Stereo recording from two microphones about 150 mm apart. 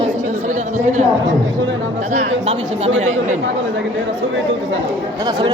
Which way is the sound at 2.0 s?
50° right (ahead or behind).